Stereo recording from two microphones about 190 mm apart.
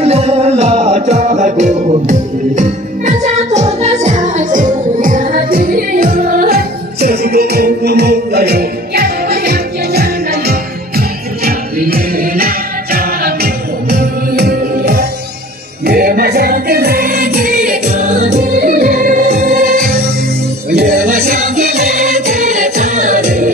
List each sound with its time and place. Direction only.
0.0 s music: 35° right (ahead or behind)